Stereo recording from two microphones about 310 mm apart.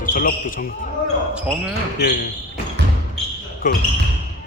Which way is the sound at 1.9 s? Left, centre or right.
Left.